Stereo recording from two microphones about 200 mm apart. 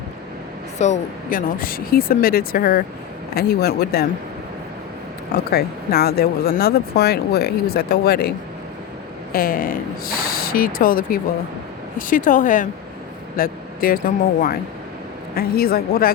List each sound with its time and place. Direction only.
0.8 s speech: 40° left (ahead or behind)
5.5 s speech: 50° left (ahead or behind)
9.3 s speech: 45° left (ahead or behind)